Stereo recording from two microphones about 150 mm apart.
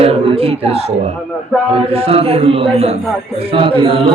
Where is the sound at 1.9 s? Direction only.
40° right (ahead or behind).